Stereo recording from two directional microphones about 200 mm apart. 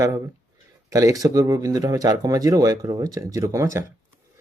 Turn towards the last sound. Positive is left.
turn(degrees=-15)  # may be behind; listen again after turning